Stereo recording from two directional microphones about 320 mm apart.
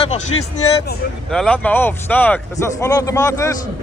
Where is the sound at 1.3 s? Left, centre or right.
Centre.